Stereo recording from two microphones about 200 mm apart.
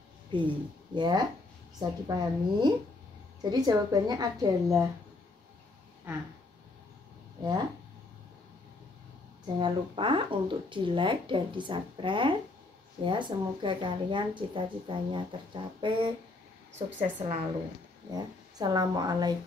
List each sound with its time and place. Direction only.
0.3 s a woman's voice: 25° right (ahead or behind)
9.6 s a woman's voice: 25° right (ahead or behind)
18.1 s speech: 20° right (ahead or behind)